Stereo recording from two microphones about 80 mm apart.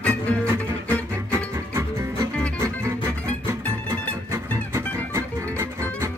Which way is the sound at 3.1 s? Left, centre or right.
Right.